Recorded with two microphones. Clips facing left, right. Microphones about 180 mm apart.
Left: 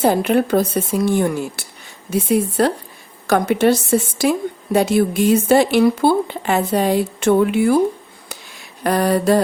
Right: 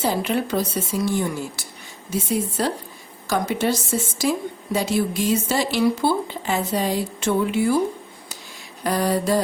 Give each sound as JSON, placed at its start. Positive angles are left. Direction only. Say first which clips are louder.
{"t": 0.0, "sound": "a woman's voice", "louder": "left 7 dB", "side_deg": 55}
{"t": 8.8, "sound": "a woman's voice", "louder": "left 5 dB", "side_deg": 65}